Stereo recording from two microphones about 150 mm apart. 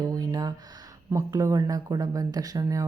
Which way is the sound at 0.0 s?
25° right (ahead or behind).